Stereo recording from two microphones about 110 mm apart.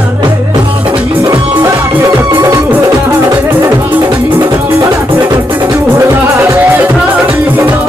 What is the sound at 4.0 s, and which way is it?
Music, 45° right (ahead or behind).